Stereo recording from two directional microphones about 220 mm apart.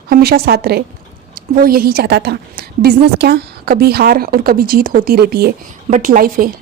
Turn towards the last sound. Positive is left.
turn(degrees=-40)  # may be behind; listen again after turning